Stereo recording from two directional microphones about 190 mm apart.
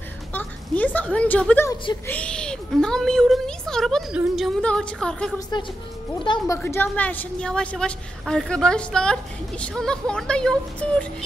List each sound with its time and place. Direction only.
0.3 s a sound: 10° left (ahead or behind)
2.0 s a woman's voice: 5° left (ahead or behind)
5.5 s a woman's voice: 20° left (ahead or behind); by 11.1 s 5° left (ahead or behind)